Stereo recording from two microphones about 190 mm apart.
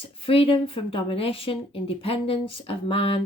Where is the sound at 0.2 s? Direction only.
30° left (ahead or behind).